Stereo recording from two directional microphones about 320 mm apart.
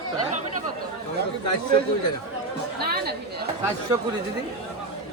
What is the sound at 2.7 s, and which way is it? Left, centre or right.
Chatter, right.